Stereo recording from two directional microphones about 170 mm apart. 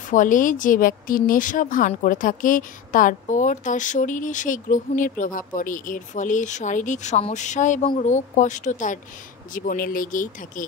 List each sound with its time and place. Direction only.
0.1 s a woman's voice: 50° left (ahead or behind)